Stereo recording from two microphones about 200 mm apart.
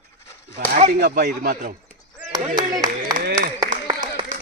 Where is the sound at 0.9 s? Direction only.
55° right (ahead or behind).